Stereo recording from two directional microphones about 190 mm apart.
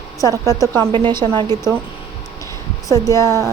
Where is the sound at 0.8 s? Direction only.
25° right (ahead or behind).